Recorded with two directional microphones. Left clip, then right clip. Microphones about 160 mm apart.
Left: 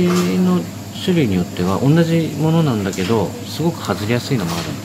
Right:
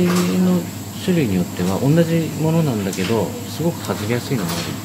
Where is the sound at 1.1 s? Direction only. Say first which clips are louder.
Left 2 dB; 50° left (ahead or behind).